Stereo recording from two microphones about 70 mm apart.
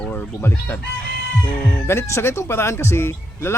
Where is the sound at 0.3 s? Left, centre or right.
Left.